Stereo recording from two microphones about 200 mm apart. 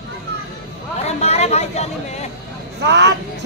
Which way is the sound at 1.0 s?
30° left (ahead or behind).